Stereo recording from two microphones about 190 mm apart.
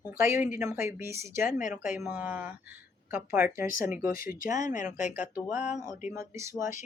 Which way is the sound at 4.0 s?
45° left (ahead or behind).